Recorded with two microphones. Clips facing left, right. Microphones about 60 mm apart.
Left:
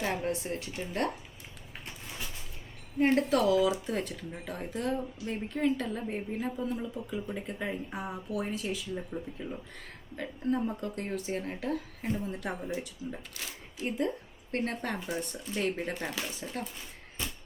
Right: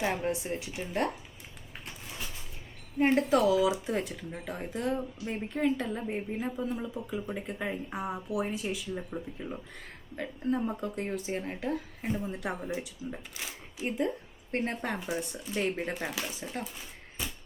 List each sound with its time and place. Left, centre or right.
0.5 s a woman's voice: centre
3.0 s a woman's voice: centre
14.9 s a woman's voice: centre
17.2 s a sound: centre